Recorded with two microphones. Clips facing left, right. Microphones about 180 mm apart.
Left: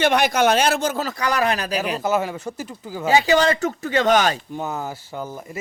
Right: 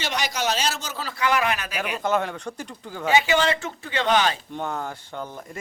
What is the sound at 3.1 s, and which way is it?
Speech, 35° left (ahead or behind).